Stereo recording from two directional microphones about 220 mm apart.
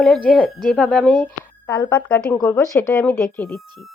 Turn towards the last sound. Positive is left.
turn(degrees=5)  # may be behind; listen again after turning